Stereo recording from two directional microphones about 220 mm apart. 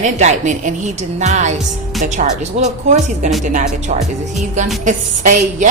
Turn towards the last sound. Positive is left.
turn(degrees=-35)  # may be behind; listen again after turning